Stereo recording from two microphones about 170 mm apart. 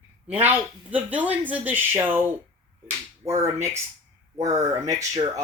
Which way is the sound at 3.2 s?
35° right (ahead or behind).